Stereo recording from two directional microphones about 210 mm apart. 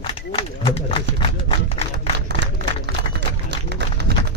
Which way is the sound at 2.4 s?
55° right (ahead or behind).